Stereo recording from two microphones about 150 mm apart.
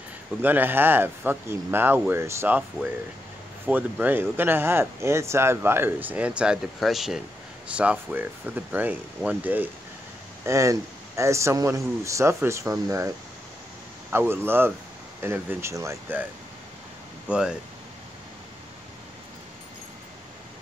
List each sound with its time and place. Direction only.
0.4 s a man's voice: 15° right (ahead or behind)
14.1 s speech: 15° right (ahead or behind)
17.3 s speech: 5° right (ahead or behind)